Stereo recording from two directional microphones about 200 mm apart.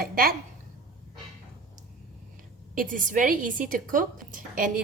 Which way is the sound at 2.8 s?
40° right (ahead or behind).